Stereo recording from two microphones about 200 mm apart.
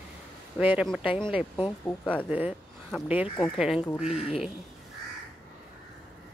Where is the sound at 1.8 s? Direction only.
5° left (ahead or behind).